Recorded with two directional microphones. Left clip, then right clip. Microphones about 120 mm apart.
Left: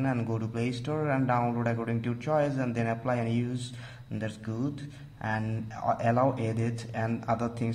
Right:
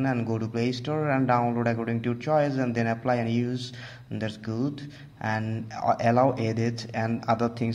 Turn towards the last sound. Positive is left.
turn(degrees=-25)  # may be behind; listen again after turning